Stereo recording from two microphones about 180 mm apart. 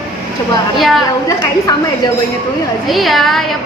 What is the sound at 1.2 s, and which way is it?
Speech, 20° left (ahead or behind).